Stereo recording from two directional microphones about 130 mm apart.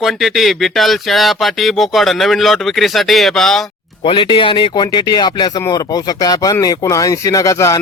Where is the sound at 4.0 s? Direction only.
40° left (ahead or behind).